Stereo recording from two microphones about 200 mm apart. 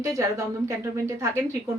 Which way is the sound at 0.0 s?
15° right (ahead or behind).